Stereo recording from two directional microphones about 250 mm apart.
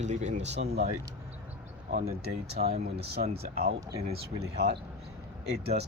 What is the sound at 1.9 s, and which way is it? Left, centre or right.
Speech, right.